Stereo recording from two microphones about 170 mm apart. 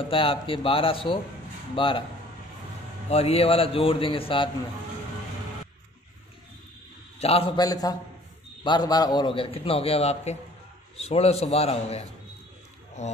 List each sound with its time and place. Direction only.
0.0 s a man's voice: 30° left (ahead or behind)
3.1 s a man's voice: 35° left (ahead or behind)
7.2 s a man's voice: 35° left (ahead or behind)